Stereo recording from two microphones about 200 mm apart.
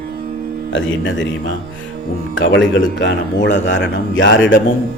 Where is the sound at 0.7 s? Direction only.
70° left (ahead or behind).